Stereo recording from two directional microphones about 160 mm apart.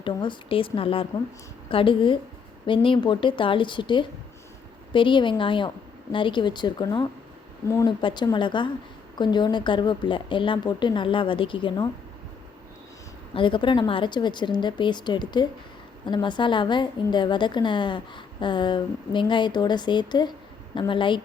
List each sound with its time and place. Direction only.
0.0 s a woman's voice: 30° left (ahead or behind)
13.3 s a woman's voice: 30° left (ahead or behind)